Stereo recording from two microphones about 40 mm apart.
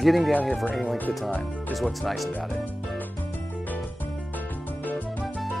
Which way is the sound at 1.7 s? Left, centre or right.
Centre.